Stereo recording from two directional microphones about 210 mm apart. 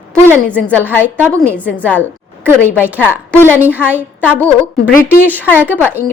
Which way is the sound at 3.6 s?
10° right (ahead or behind).